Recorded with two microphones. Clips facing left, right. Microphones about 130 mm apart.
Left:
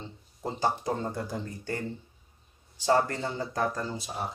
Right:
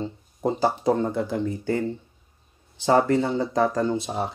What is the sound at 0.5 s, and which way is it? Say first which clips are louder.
Speech: right 7 dB; 90° right.